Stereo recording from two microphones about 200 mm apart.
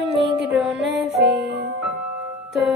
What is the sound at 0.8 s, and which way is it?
Music, 60° right (ahead or behind).